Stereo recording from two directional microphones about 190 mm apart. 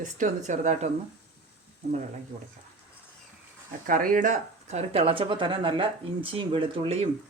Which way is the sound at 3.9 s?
45° right (ahead or behind).